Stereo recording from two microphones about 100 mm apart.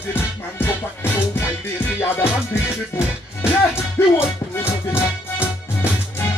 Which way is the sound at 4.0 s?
25° left (ahead or behind).